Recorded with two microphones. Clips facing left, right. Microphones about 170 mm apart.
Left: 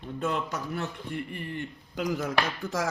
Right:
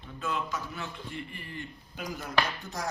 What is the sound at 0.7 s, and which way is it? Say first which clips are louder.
Speech: left 6 dB; 60° left (ahead or behind).